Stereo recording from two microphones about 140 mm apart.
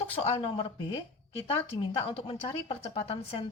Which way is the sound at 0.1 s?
45° left (ahead or behind).